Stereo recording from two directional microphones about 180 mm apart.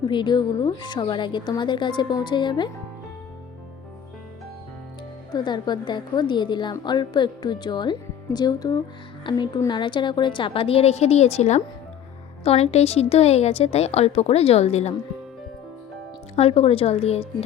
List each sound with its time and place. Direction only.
0.1 s a woman's voice: 25° left (ahead or behind)
5.3 s a woman's voice: 25° left (ahead or behind)
16.3 s a woman's voice: 35° left (ahead or behind)